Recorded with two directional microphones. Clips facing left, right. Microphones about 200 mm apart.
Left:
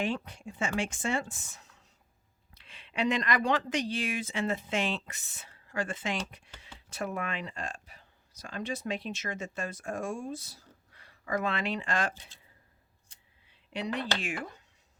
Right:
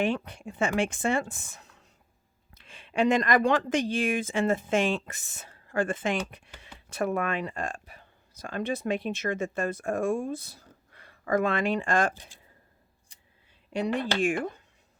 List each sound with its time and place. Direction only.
0.0 s speech: 60° right (ahead or behind)
13.7 s speech: 50° right (ahead or behind)